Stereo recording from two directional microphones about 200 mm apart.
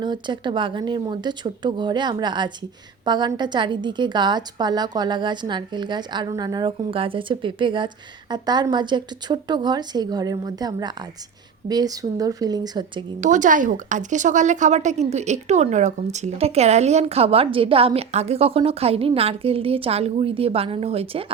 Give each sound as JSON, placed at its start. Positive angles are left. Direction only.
{"t": 0.0, "sound": "a woman's voice", "side_deg": -25}
{"t": 13.1, "sound": "speech", "side_deg": -40}